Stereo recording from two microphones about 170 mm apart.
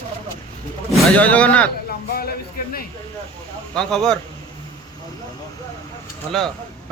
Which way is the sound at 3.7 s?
5° left (ahead or behind).